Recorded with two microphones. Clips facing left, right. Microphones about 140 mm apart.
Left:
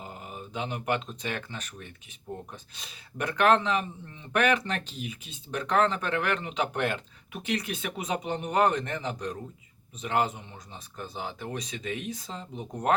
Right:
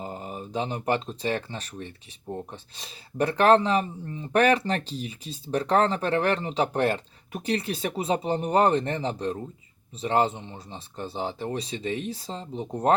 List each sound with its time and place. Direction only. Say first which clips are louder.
0.0 s speech: right 6 dB; 35° right (ahead or behind)